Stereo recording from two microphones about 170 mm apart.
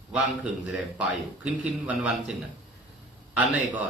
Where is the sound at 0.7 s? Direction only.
Centre (ahead or behind).